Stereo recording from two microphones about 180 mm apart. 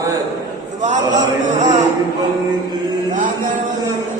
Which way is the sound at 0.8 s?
40° right (ahead or behind).